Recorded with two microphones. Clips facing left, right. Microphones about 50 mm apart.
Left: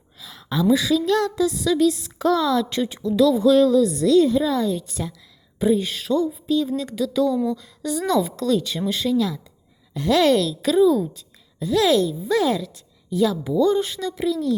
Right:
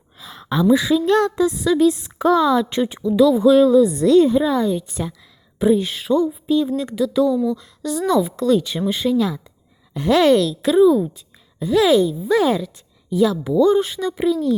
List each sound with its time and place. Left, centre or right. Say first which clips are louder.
0.2 s a sound: right 3 dB; right
0.7 s speech: right 3 dB; right
5.5 s speech: right 3 dB; centre
6.1 s speech: right 3 dB; right
6.7 s speech: right 3 dB; centre
7.8 s a woman's voice: right 2 dB; centre
8.0 s speech: right 4 dB; centre; by 10.3 s right
10.3 s speech: right 4 dB; centre
10.7 s speech: right 3 dB; right
11.9 s speech: right 3 dB; centre
12.4 s speech: right 2 dB; right
13.1 s speech: right 3 dB; centre
14.2 s speech: right 4 dB; right